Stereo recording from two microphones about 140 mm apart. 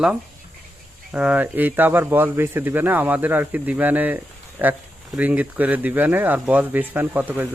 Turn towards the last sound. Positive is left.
turn(degrees=-10)  # may be behind; listen again after turning